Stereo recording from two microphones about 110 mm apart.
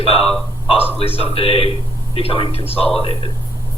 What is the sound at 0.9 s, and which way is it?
Speech, 60° left (ahead or behind).